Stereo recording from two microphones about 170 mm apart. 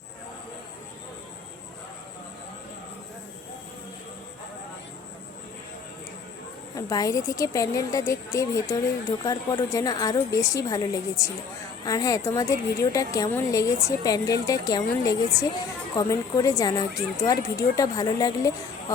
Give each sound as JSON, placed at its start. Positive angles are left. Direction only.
{"t": 6.7, "sound": "speech", "side_deg": 20}